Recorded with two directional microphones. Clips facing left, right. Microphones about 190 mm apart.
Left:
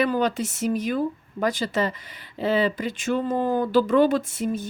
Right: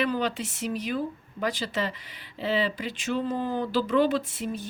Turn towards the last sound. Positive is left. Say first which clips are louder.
# left 6 dB
turn(degrees=45)  # may be behind; listen again after turning